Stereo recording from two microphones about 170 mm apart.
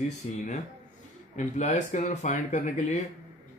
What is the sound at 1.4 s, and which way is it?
Speech, 45° left (ahead or behind).